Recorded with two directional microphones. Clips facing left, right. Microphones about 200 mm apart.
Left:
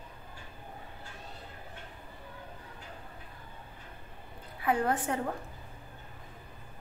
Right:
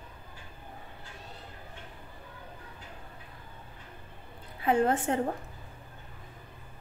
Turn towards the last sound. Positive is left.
turn(degrees=-25)  # may be behind; listen again after turning